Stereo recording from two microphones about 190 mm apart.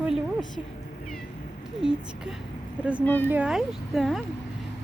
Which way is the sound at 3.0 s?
10° left (ahead or behind).